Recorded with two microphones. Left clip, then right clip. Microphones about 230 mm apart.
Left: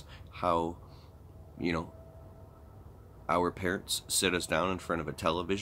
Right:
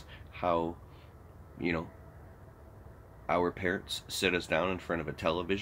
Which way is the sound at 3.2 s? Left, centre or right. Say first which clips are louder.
Even; centre.